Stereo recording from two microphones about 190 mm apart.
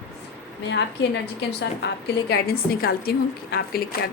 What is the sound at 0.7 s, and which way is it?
A woman's voice, 65° left (ahead or behind).